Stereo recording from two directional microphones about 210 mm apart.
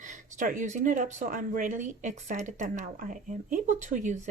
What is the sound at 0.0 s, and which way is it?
Speech, 35° right (ahead or behind).